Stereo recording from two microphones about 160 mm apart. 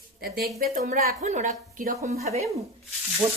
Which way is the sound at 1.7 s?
60° right (ahead or behind).